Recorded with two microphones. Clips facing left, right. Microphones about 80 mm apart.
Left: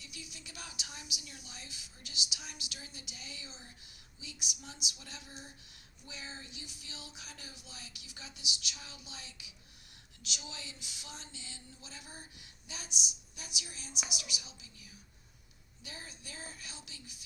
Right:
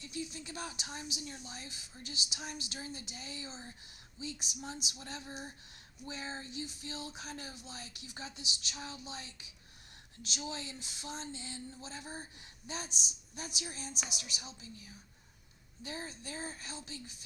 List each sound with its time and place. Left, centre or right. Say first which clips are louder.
0.0 s speech: right 9 dB; right